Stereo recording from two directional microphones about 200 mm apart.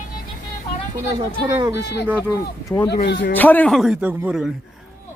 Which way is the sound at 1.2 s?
25° right (ahead or behind).